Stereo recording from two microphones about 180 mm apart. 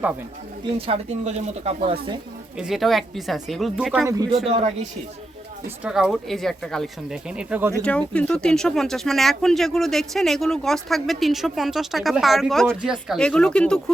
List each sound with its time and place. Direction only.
0.8 s speech: 35° right (ahead or behind)
2.6 s speech: centre (ahead or behind)
4.4 s speech: 35° right (ahead or behind)
5.6 s speech: 5° right (ahead or behind)
7.7 s speech: 5° left (ahead or behind)